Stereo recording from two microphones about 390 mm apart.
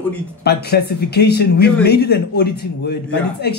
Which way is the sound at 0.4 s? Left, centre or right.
Left.